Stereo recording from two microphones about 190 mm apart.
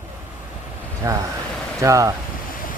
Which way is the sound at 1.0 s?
15° right (ahead or behind).